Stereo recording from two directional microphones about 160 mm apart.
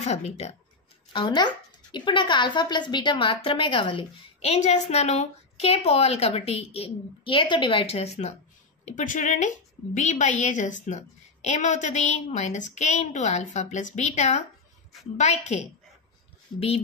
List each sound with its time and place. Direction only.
0.0 s a woman's voice: 45° left (ahead or behind)
1.1 s a woman's voice: 30° left (ahead or behind)
8.8 s a woman's voice: 55° left (ahead or behind)